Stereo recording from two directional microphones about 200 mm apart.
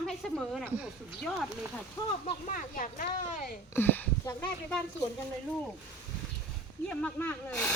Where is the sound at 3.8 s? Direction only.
10° left (ahead or behind).